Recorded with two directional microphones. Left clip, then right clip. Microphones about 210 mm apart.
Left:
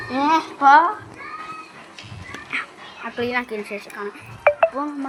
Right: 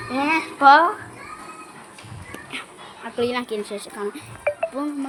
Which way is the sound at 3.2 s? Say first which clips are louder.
Even; 15° right (ahead or behind).